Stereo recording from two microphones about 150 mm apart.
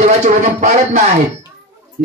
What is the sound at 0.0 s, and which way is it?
Speech, 50° right (ahead or behind).